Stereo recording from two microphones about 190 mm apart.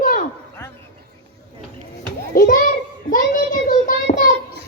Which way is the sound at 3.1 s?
45° left (ahead or behind).